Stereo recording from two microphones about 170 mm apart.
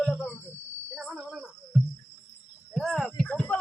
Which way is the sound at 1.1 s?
5° right (ahead or behind).